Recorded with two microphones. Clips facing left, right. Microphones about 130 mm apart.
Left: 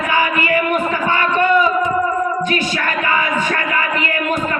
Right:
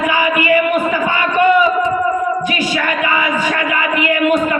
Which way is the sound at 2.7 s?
40° left (ahead or behind).